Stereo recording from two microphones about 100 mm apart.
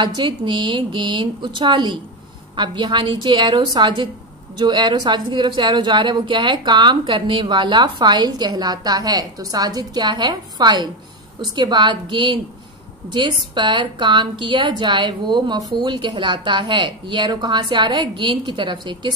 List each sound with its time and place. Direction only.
0.0 s a woman's voice: 50° right (ahead or behind)